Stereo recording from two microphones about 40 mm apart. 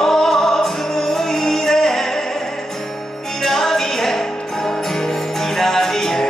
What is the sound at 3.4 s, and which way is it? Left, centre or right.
Music, centre.